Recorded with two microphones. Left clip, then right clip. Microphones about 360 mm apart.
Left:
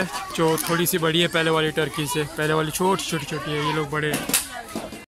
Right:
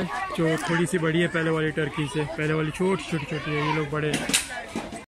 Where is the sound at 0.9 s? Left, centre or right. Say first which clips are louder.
Left 3 dB; centre.